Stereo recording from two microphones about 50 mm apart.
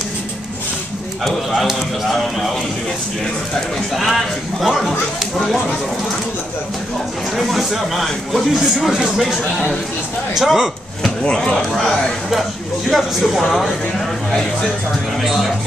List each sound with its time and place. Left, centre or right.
1.2 s speech: centre
3.9 s speech: centre
7.3 s a man's voice: centre
11.1 s speech: centre
12.9 s speech: centre